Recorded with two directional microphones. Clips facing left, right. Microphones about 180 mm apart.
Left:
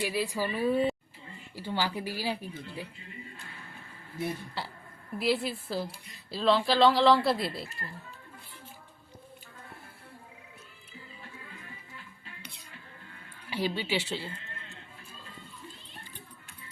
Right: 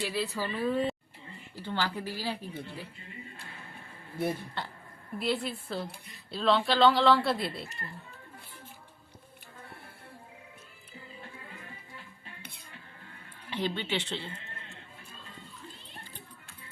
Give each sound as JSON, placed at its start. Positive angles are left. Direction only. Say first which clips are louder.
{"t": 0.0, "sound": "speech", "louder": "left 2 dB", "side_deg": 10}
{"t": 5.1, "sound": "speech", "louder": "left 3 dB", "side_deg": 5}
{"t": 12.4, "sound": "cutlery", "louder": "even", "side_deg": -55}
{"t": 13.5, "sound": "speech", "louder": "left 1 dB", "side_deg": 10}